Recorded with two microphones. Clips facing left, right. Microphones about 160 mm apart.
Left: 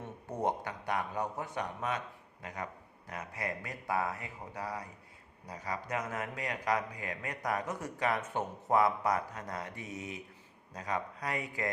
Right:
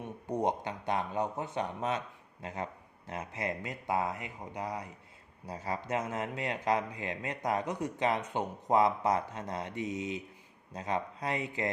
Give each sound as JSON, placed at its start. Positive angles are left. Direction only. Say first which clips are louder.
{"t": 0.0, "sound": "speech", "louder": "right 3 dB", "side_deg": -15}